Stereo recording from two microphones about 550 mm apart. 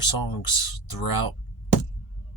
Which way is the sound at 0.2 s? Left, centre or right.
Left.